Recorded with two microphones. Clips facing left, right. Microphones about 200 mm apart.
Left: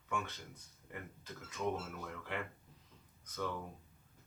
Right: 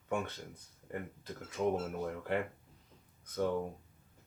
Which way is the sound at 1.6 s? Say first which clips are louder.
Right 5 dB; 45° right (ahead or behind).